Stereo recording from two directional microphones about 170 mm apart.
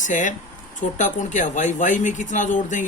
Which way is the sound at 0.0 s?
50° left (ahead or behind).